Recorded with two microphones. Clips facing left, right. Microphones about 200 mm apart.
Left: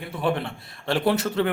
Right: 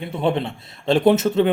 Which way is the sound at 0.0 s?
25° right (ahead or behind).